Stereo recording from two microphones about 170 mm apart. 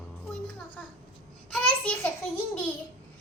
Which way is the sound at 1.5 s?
5° left (ahead or behind).